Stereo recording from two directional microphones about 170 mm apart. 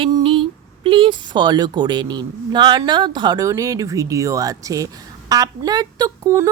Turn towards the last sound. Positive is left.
turn(degrees=-20)  # may be behind; listen again after turning